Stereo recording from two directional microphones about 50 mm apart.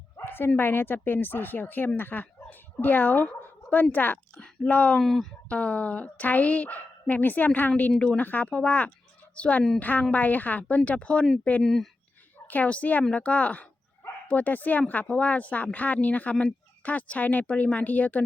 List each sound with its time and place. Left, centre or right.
0.2 s speech: left
4.9 s speech: centre
5.5 s speech: left
7.9 s speech: centre
8.2 s a woman's voice: left
11.6 s speech: centre
12.6 s speech: left